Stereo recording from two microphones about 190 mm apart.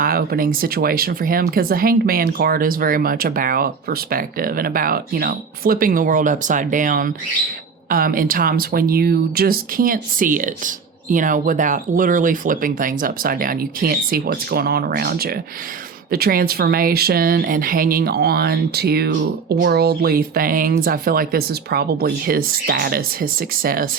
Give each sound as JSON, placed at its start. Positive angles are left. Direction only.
{"t": 0.0, "sound": "speech", "side_deg": -50}